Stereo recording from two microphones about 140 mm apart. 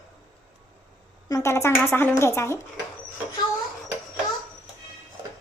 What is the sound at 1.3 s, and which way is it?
A woman's voice, 20° left (ahead or behind).